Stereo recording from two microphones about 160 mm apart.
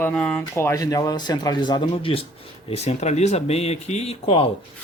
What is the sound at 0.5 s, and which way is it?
Speech, 20° left (ahead or behind).